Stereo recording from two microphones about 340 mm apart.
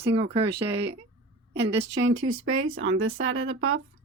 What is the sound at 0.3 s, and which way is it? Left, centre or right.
Speech, right.